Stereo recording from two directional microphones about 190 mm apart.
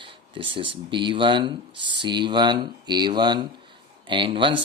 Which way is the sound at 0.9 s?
25° right (ahead or behind).